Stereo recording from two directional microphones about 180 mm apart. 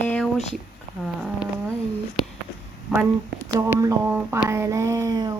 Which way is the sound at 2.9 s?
Centre (ahead or behind).